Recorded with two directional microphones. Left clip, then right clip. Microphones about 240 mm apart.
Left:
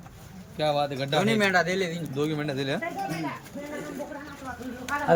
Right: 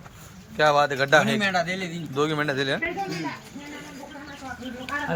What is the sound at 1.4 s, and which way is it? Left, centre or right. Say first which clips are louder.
Speech: left 1 dB; centre.